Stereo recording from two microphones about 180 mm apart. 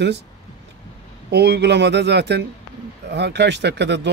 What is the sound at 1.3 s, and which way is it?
Speech, 65° right (ahead or behind).